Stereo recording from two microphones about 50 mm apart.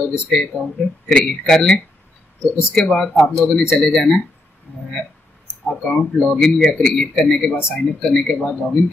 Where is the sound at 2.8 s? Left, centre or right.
Centre.